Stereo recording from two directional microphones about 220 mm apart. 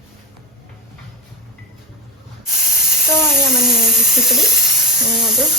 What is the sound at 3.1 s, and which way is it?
Speech, 10° left (ahead or behind).